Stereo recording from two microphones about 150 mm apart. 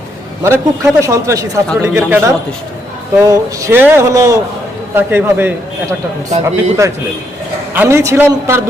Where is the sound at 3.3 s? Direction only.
15° right (ahead or behind).